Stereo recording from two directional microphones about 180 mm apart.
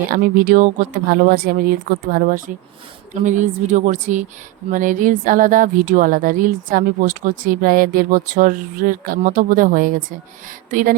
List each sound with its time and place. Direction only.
0.1 s speech: 50° right (ahead or behind)